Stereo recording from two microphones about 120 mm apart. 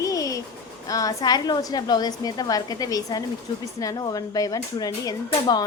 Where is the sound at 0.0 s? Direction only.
30° left (ahead or behind).